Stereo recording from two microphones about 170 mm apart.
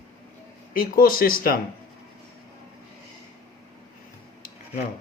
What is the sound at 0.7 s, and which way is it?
Speech, 55° left (ahead or behind).